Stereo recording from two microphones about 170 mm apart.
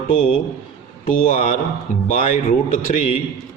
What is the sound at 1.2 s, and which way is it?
Speech, 50° left (ahead or behind).